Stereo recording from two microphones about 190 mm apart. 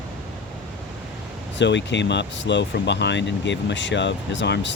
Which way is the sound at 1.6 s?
70° left (ahead or behind).